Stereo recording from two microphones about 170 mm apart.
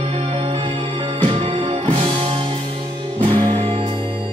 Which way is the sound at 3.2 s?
30° right (ahead or behind).